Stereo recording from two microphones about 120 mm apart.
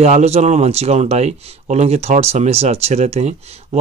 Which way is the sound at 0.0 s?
65° right (ahead or behind).